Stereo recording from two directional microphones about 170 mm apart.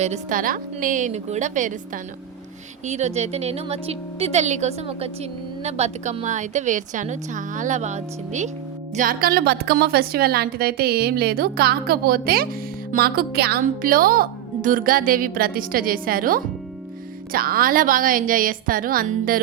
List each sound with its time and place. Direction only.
0.0 s a woman's voice: 45° right (ahead or behind)
9.0 s a woman's voice: 60° right (ahead or behind)